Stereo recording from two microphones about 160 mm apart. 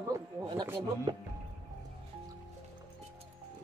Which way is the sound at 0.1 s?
20° right (ahead or behind).